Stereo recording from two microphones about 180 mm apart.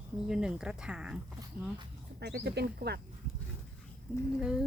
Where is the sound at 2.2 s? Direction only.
65° right (ahead or behind).